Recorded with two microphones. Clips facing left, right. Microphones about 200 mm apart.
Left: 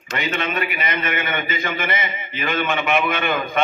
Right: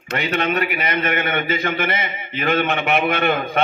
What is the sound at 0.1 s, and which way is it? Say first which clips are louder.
A man's voice: right 3 dB; 60° right (ahead or behind).